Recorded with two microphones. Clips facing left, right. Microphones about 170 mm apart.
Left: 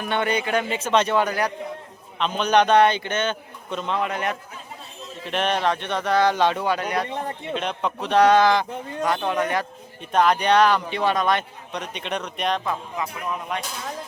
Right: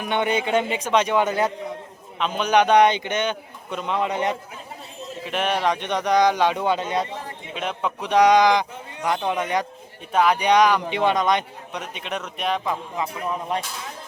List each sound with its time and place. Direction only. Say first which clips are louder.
0.0 s speech: right 1 dB; 20° right (ahead or behind)
2.1 s a man's voice: even; 10° right (ahead or behind)
5.2 s a man's voice: even; 10° right (ahead or behind)
7.5 s a man's voice: even; 5° right (ahead or behind)
11.8 s speech: left 2 dB; 5° right (ahead or behind)
13.5 s speech: right 4 dB; 35° right (ahead or behind)